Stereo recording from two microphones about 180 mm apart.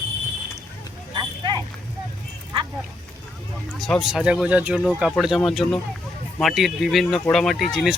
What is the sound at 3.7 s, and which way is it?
Speech, centre (ahead or behind).